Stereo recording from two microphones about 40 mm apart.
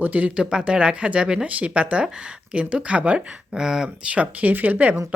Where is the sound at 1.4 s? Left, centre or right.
Right.